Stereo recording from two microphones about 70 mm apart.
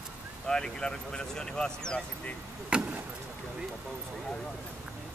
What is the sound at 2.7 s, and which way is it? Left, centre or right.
Speech, centre.